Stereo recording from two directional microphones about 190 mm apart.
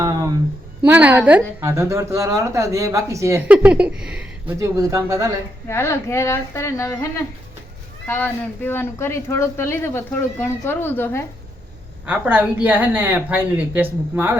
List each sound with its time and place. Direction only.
0.0 s a sound: 20° right (ahead or behind)
0.9 s a woman's voice: 10° right (ahead or behind)
4.6 s a woman's voice: 15° right (ahead or behind)
5.6 s speech: 15° left (ahead or behind)
8.0 s speech: 10° left (ahead or behind)
12.0 s a woman's voice: 10° right (ahead or behind)